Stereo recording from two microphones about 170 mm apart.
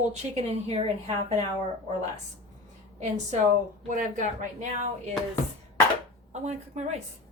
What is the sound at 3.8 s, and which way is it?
Speech, 50° right (ahead or behind).